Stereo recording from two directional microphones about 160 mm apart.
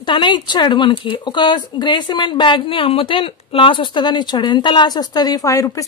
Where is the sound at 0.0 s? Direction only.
30° left (ahead or behind).